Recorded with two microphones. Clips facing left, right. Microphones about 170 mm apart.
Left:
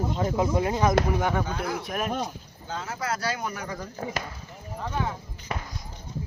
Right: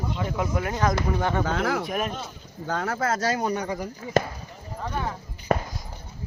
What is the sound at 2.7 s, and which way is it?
Speech, 65° right (ahead or behind).